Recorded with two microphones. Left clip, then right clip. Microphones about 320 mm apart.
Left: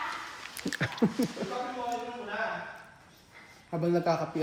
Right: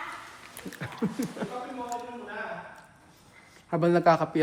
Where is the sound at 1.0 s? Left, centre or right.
Left.